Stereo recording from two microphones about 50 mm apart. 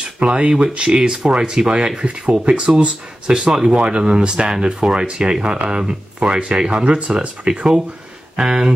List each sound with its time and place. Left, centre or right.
0.0 s speech: right